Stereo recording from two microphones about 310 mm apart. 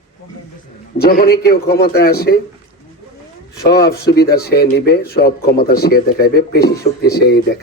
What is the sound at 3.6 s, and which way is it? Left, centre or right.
A man's voice, left.